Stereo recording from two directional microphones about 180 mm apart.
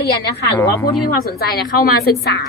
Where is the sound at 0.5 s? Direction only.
20° left (ahead or behind).